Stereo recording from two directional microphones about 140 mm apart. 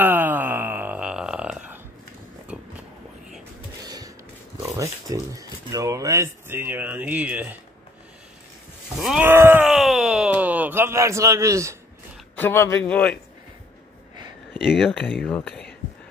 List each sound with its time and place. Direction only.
0.0 s wail: 15° right (ahead or behind)
2.5 s a sound: 10° right (ahead or behind)
3.8 s a sound: 30° right (ahead or behind)
4.6 s speech: 20° right (ahead or behind)
9.2 s wail: 15° right (ahead or behind)
9.7 s groan: centre (ahead or behind); by 11.7 s 20° right (ahead or behind)
12.4 s a man's voice: 15° left (ahead or behind)
14.6 s speech: 5° right (ahead or behind)
15.0 s a man's voice: 10° left (ahead or behind)